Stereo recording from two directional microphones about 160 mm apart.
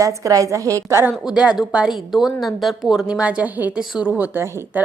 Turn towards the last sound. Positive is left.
turn(degrees=-10)  # may be behind; listen again after turning